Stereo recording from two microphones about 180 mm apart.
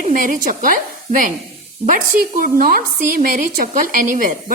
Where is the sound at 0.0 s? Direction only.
50° right (ahead or behind).